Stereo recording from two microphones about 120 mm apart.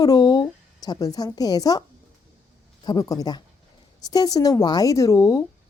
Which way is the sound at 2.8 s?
35° left (ahead or behind).